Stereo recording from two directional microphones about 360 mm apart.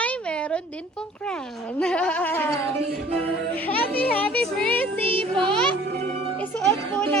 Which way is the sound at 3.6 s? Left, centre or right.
Centre.